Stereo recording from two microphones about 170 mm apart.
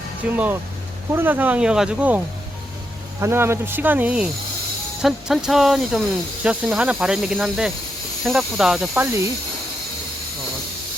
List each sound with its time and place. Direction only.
0.2 s speech: 5° right (ahead or behind)
5.0 s snake: centre (ahead or behind)
9.0 s speech: 15° right (ahead or behind)